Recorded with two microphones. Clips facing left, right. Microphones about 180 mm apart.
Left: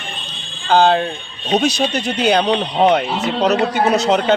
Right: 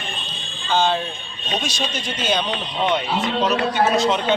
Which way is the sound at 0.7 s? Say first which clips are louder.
Left 7 dB; 65° left (ahead or behind).